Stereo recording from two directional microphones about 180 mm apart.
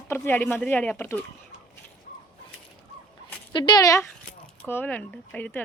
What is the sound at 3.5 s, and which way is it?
Speech, 25° left (ahead or behind).